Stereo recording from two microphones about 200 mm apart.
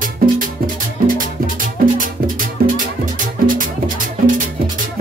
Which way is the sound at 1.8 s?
40° right (ahead or behind).